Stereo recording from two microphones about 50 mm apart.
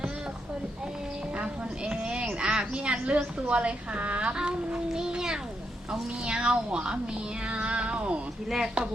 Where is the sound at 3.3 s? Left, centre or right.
Right.